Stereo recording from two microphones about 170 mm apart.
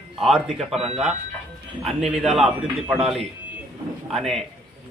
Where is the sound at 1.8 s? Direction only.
Centre (ahead or behind).